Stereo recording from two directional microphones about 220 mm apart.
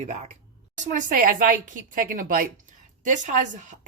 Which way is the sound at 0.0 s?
30° right (ahead or behind).